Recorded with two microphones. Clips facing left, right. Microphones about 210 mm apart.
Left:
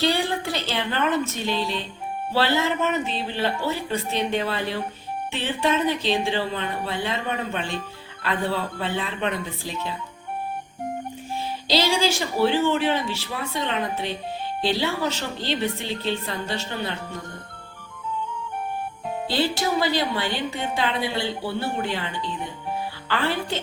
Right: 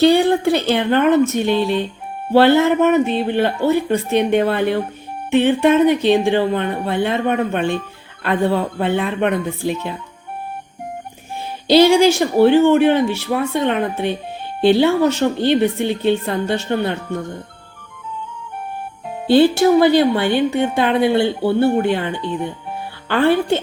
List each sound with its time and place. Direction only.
0.0 s a woman's voice: 55° right (ahead or behind)
11.7 s a woman's voice: 60° right (ahead or behind)
19.3 s a woman's voice: 55° right (ahead or behind)